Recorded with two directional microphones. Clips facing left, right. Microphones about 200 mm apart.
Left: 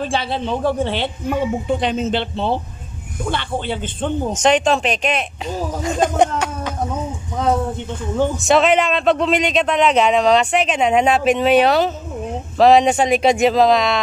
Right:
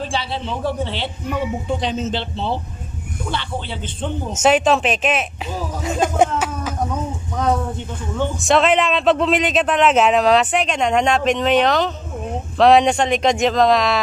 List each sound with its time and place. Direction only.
0.1 s a man's voice: 50° left (ahead or behind)
4.3 s speech: 5° right (ahead or behind)
5.9 s a sound: 5° right (ahead or behind)
8.4 s speech: centre (ahead or behind)